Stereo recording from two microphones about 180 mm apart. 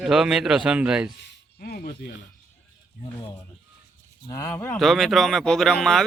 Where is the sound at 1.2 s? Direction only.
65° left (ahead or behind).